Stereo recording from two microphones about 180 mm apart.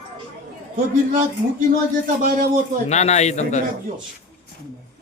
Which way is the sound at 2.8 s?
40° left (ahead or behind).